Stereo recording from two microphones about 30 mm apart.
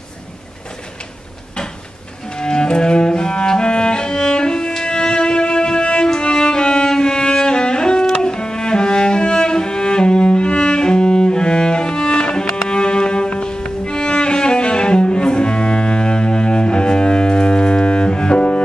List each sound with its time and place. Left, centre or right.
2.3 s cello: left
6.0 s music: left
8.1 s cello: left